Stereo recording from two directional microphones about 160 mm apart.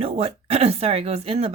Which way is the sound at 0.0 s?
40° right (ahead or behind).